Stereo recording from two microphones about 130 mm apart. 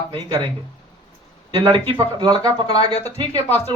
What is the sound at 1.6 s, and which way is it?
Speech, 35° right (ahead or behind).